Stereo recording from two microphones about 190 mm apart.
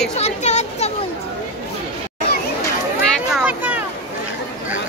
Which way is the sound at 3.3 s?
10° right (ahead or behind).